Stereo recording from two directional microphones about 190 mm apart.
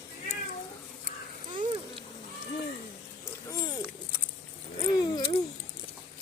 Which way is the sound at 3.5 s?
20° left (ahead or behind).